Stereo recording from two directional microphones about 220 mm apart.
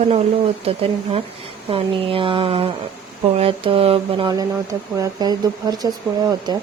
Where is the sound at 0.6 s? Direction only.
25° right (ahead or behind).